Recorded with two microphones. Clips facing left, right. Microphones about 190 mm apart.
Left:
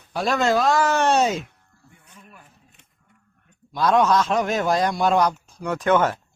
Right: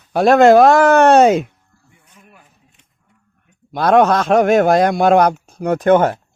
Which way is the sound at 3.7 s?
60° right (ahead or behind).